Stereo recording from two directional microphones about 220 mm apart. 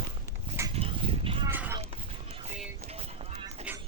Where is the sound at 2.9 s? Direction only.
25° right (ahead or behind).